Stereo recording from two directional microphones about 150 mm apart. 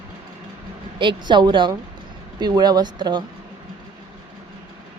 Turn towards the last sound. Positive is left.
turn(degrees=-30)  # may be behind; listen again after turning